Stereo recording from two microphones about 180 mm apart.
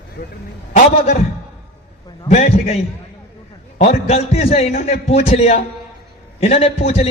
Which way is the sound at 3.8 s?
35° left (ahead or behind).